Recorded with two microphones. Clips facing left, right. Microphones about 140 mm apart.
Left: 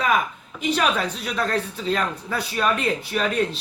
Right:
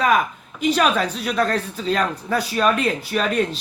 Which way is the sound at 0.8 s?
50° right (ahead or behind).